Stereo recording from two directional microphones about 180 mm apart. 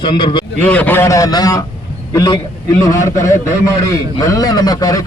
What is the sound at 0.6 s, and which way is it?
A man's voice, 10° left (ahead or behind).